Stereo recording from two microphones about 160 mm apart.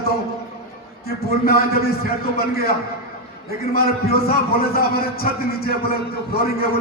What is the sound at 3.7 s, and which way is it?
A man's voice, 70° left (ahead or behind).